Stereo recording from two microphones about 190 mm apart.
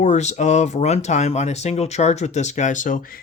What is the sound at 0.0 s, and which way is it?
Speech, 35° left (ahead or behind).